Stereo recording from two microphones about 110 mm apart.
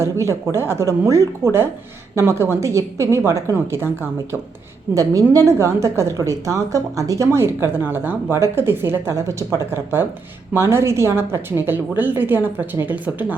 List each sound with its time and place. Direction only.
0.0 s a woman's voice: 25° right (ahead or behind)
4.9 s a woman's voice: 30° right (ahead or behind)